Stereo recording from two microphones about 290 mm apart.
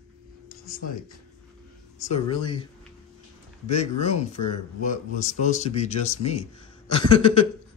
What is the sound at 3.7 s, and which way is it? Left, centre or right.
Speech, left.